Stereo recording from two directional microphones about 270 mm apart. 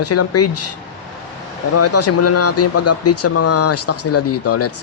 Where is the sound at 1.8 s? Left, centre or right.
Left.